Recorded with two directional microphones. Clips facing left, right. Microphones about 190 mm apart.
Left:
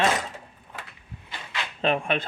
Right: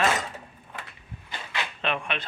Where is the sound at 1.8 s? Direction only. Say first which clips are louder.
Left 7 dB; 40° left (ahead or behind).